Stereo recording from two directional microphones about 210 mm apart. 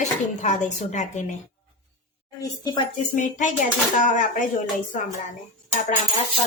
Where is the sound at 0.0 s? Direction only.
35° left (ahead or behind).